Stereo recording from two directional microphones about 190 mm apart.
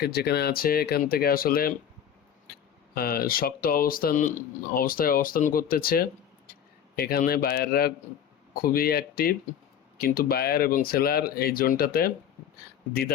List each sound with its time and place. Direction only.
0.0 s speech: 55° left (ahead or behind)
2.9 s speech: 55° left (ahead or behind)